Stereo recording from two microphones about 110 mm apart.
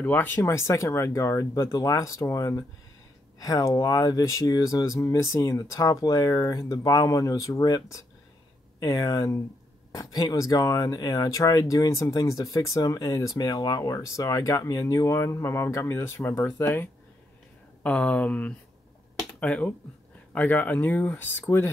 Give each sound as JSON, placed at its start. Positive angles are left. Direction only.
{"t": 0.0, "sound": "speech", "side_deg": 15}